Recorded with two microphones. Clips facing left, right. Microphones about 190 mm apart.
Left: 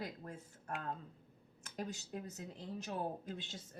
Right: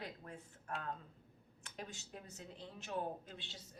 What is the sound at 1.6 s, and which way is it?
A woman's voice, 40° left (ahead or behind).